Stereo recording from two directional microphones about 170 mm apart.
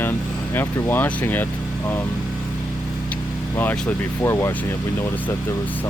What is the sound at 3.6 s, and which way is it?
Speech, 10° left (ahead or behind).